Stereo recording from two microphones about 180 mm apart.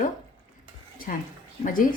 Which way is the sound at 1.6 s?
50° left (ahead or behind).